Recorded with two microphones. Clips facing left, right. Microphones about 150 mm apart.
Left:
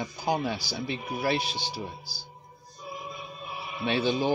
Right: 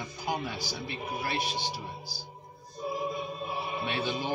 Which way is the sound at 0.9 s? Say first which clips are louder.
Left 7 dB; 90° left.